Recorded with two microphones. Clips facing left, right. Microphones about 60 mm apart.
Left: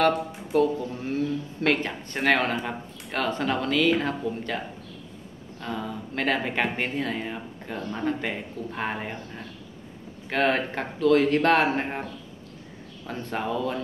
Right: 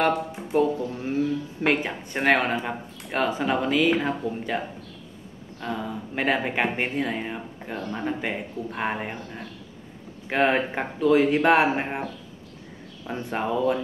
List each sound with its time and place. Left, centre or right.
0.1 s speech: right
13.1 s speech: centre